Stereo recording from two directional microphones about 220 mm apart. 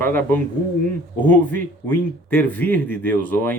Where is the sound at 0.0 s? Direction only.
10° left (ahead or behind).